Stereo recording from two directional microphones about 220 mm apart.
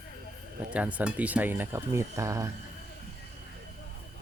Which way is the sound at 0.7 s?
5° right (ahead or behind).